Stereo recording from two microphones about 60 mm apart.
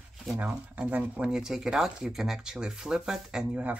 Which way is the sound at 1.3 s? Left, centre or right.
Centre.